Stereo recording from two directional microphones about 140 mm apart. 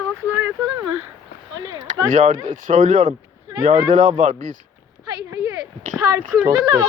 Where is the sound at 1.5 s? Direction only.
30° right (ahead or behind).